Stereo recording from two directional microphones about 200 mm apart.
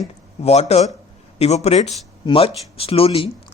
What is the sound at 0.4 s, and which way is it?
Speech, 30° left (ahead or behind).